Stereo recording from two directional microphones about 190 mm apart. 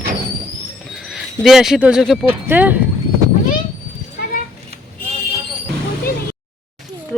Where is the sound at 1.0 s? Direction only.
Centre (ahead or behind).